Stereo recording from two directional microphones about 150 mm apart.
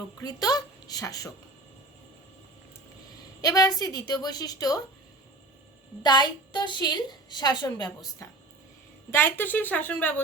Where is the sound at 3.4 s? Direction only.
25° left (ahead or behind).